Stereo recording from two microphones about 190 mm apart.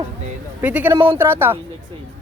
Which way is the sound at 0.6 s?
10° right (ahead or behind).